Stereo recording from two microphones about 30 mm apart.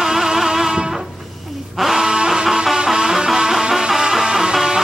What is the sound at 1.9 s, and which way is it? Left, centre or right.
Music, right.